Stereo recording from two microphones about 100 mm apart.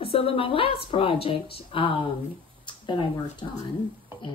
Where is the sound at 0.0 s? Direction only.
70° left (ahead or behind).